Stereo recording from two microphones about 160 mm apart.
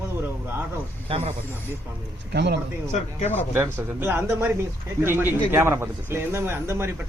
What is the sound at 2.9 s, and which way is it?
Speech, 45° left (ahead or behind).